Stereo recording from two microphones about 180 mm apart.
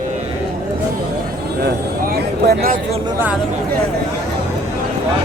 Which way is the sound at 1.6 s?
60° right (ahead or behind).